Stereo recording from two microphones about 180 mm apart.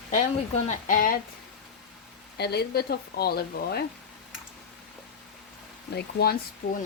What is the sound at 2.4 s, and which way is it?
Speech, 65° left (ahead or behind).